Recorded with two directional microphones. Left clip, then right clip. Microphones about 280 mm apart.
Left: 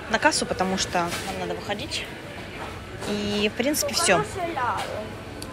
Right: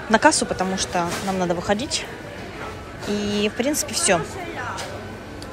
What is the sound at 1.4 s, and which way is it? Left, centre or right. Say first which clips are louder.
Speech: right 7 dB; centre.